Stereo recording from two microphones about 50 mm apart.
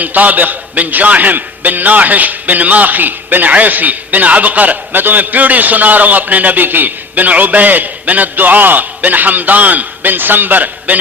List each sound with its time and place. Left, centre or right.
0.0 s a man's voice: right